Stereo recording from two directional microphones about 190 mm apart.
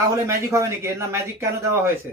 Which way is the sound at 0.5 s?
15° right (ahead or behind).